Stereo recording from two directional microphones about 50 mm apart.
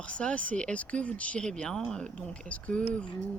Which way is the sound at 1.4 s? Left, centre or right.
Centre.